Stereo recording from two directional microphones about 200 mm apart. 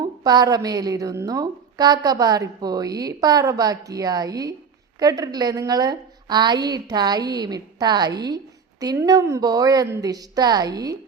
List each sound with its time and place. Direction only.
0.3 s a woman's voice: 20° right (ahead or behind)